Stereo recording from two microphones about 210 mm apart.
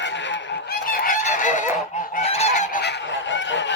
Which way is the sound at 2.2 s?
30° left (ahead or behind).